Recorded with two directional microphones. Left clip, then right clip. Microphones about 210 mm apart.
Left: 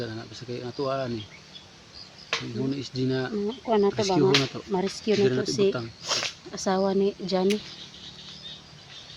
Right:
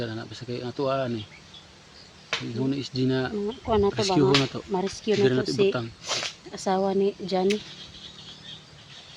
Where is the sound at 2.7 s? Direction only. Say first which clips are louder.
Right 2 dB; 45° right (ahead or behind).